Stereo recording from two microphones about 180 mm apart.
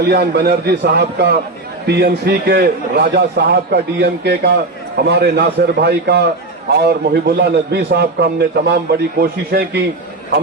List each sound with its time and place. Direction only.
0.0 s a man's voice: 65° right (ahead or behind)